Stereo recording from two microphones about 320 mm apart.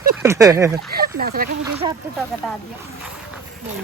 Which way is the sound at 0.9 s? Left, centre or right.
Right.